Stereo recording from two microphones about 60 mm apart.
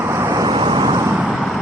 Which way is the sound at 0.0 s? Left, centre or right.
Right.